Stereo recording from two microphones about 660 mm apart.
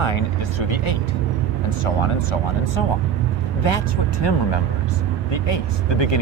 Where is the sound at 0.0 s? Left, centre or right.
Left.